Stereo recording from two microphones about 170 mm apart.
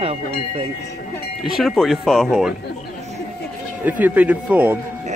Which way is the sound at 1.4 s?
Centre (ahead or behind).